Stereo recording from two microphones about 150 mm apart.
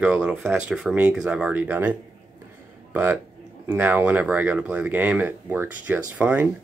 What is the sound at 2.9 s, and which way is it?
Speech, 10° right (ahead or behind).